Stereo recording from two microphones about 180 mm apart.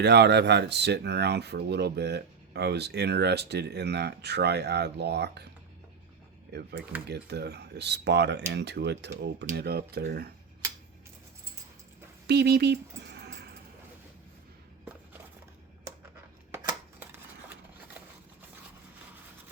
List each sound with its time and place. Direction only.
0.0 s speech: 70° right (ahead or behind)
6.5 s speech: 65° right (ahead or behind)
12.3 s a sound: 65° right (ahead or behind)